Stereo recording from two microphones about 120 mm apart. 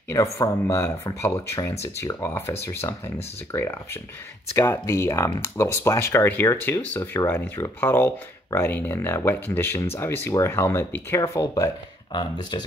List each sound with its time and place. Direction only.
0.1 s speech: 25° left (ahead or behind)